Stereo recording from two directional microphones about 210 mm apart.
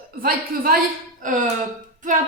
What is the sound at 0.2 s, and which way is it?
A woman's voice, 45° right (ahead or behind).